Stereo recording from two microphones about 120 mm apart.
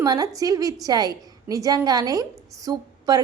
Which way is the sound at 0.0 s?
30° right (ahead or behind).